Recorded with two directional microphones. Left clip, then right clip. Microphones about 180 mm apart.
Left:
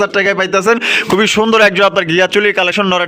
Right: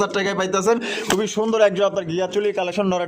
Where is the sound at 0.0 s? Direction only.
30° left (ahead or behind).